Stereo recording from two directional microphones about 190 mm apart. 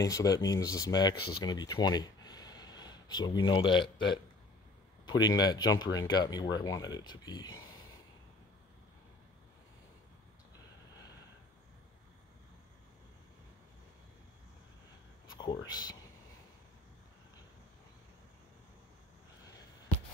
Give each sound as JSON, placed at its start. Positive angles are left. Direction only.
{"t": 0.0, "sound": "speech", "side_deg": 20}
{"t": 5.2, "sound": "speech", "side_deg": 20}
{"t": 15.3, "sound": "speech", "side_deg": 20}